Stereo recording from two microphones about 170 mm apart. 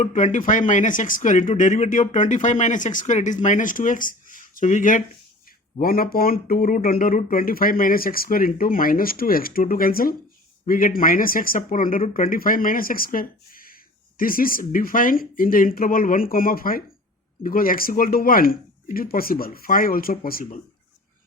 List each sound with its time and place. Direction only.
0.0 s speech: 45° left (ahead or behind)
5.8 s speech: 60° left (ahead or behind)